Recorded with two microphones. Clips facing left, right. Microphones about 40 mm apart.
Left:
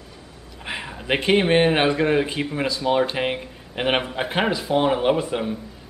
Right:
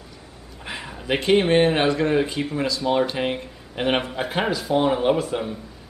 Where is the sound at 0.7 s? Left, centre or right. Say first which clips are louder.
Left 3 dB; left.